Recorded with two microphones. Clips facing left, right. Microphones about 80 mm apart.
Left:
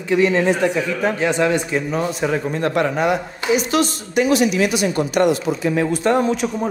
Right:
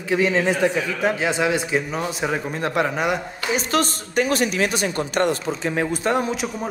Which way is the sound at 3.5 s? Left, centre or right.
Right.